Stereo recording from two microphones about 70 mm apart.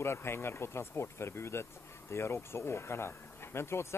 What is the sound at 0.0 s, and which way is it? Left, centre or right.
Speech, left.